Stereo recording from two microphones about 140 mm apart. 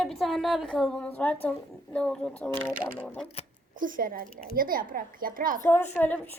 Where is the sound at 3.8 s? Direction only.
75° right (ahead or behind).